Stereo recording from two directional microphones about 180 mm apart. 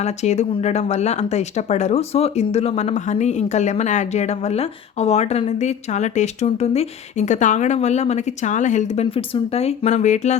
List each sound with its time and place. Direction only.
0.0 s speech: 40° left (ahead or behind)